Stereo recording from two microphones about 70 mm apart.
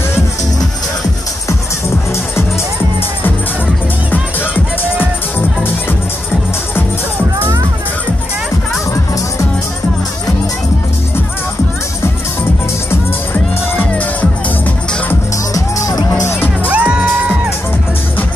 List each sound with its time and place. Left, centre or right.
13.3 s music: left
15.5 s music: left
16.2 s music: left
16.6 s music: centre